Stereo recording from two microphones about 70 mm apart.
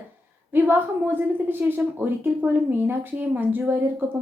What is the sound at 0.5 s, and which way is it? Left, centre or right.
A woman's voice, right.